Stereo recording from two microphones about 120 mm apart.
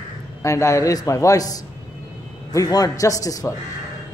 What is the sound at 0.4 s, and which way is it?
A man's voice, 25° left (ahead or behind).